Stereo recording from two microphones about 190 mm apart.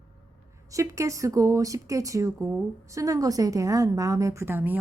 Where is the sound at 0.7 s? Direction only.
15° right (ahead or behind).